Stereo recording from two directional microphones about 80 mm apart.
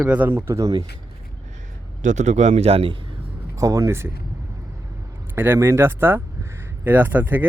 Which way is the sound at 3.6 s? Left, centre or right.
Right.